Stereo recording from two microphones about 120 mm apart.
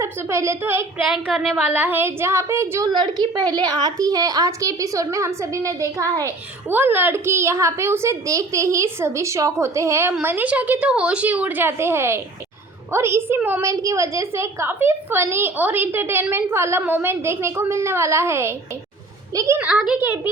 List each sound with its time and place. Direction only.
0.0 s a woman's voice: 25° right (ahead or behind)
1.0 s a woman's voice: centre (ahead or behind)
1.6 s a woman's voice: 15° right (ahead or behind)
2.9 s a woman's voice: 35° right (ahead or behind)
6.7 s a woman's voice: 15° right (ahead or behind)
19.5 s a child's voice: 10° right (ahead or behind)